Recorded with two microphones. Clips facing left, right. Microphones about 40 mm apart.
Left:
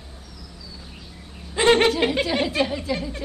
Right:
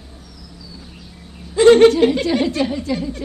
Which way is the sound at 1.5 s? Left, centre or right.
Left.